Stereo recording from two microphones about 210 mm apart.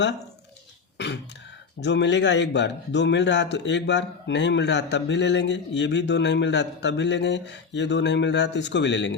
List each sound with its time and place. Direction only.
0.9 s throat clearing: 55° left (ahead or behind)
1.8 s speech: 55° left (ahead or behind)